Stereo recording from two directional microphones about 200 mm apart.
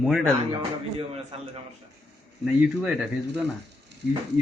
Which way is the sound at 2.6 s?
5° right (ahead or behind).